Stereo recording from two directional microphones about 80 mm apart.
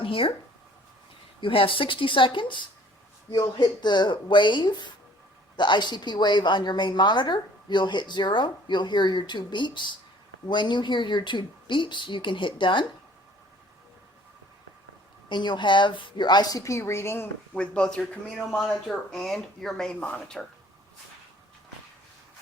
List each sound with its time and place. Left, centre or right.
0.0 s speech: left
1.4 s speech: left
3.4 s a woman's voice: left
15.3 s a woman's voice: left
17.5 s speech: centre